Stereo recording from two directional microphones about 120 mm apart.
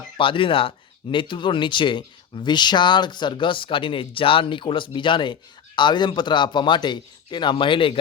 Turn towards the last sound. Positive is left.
turn(degrees=45)  # may be behind; listen again after turning